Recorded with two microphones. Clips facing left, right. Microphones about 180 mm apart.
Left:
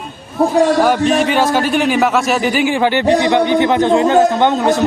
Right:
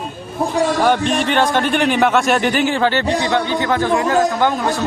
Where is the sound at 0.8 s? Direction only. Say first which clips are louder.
Left 3 dB; 5° left (ahead or behind); by 4.9 s 20° left (ahead or behind).